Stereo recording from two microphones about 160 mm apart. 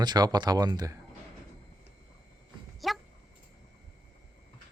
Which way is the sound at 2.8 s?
Centre (ahead or behind).